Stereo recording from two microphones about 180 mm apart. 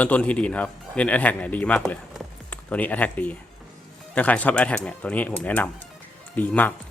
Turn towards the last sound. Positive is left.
turn(degrees=10)  # may be behind; listen again after turning